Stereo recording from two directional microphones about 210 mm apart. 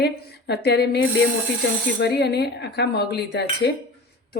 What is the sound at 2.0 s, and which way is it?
Speech, 50° left (ahead or behind).